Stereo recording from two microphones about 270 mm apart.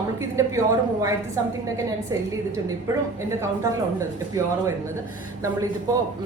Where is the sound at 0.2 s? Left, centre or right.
Centre.